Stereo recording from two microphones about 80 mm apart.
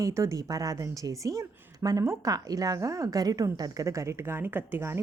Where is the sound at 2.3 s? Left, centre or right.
Right.